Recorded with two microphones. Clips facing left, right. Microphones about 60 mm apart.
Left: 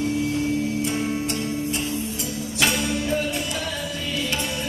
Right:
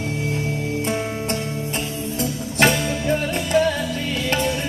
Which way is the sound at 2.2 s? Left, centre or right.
Right.